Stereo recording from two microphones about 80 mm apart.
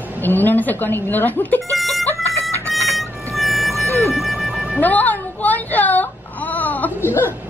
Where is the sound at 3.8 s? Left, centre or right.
Left.